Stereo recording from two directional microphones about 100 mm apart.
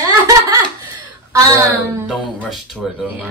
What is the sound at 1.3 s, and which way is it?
Speech, 30° right (ahead or behind).